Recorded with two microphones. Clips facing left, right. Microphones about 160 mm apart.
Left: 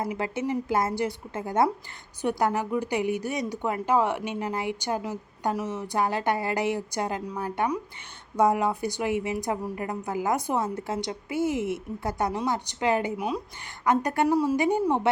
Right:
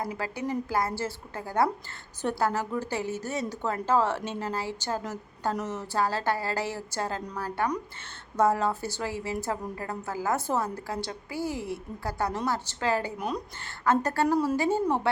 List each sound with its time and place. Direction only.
0.0 s a woman's voice: 20° left (ahead or behind)
13.1 s speech: 5° left (ahead or behind)
13.8 s a woman's voice: 15° left (ahead or behind)